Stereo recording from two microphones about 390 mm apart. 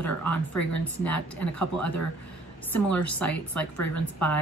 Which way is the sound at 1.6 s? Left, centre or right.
Left.